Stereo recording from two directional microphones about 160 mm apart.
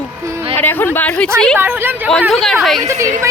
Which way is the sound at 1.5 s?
15° right (ahead or behind).